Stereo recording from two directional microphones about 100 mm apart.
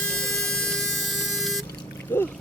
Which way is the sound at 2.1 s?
20° left (ahead or behind).